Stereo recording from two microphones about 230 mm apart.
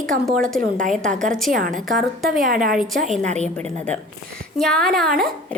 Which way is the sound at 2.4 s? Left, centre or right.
Right.